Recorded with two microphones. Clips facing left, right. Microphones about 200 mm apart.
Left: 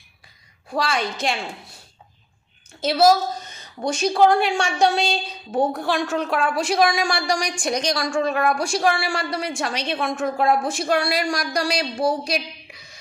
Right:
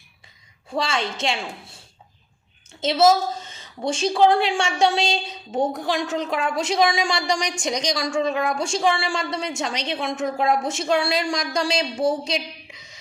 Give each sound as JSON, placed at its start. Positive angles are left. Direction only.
{"t": 0.7, "sound": "a woman's voice", "side_deg": -25}
{"t": 2.8, "sound": "a woman's voice", "side_deg": -25}
{"t": 12.2, "sound": "a sound", "side_deg": -20}